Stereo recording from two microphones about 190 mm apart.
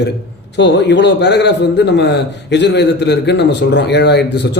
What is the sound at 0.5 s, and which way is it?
A man's voice, 70° left (ahead or behind).